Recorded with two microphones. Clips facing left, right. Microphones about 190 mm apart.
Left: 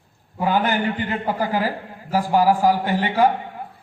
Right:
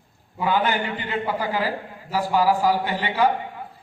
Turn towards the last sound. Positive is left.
turn(degrees=45)  # may be behind; listen again after turning